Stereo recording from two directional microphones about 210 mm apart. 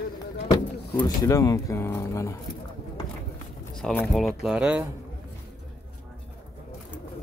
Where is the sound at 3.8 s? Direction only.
5° left (ahead or behind).